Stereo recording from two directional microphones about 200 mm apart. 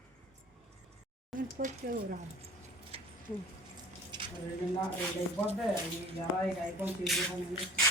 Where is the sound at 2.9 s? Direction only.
30° right (ahead or behind).